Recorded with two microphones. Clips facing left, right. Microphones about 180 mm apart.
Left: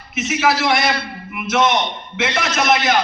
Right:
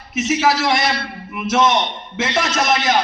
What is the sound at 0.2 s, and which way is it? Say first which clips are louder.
A man's voice: right 1 dB; 40° right (ahead or behind).